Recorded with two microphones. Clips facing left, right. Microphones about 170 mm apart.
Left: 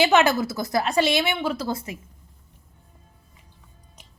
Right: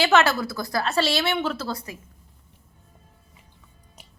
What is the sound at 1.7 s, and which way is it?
Speech, 20° left (ahead or behind).